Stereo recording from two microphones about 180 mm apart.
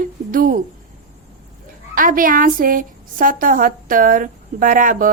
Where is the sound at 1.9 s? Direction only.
50° right (ahead or behind).